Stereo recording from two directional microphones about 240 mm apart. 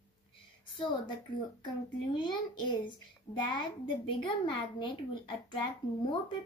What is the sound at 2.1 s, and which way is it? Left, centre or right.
A child's voice, centre.